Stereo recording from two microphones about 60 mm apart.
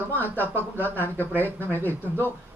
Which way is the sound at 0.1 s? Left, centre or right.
Left.